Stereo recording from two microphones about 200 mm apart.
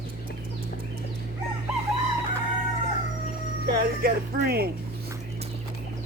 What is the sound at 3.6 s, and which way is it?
Speech, 50° right (ahead or behind).